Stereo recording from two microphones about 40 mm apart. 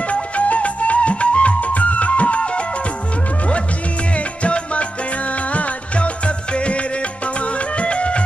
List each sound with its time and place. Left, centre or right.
0.1 s music: left
4.4 s music: left